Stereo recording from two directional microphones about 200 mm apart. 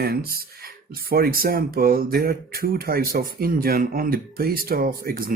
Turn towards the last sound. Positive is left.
turn(degrees=-50)  # may be behind; listen again after turning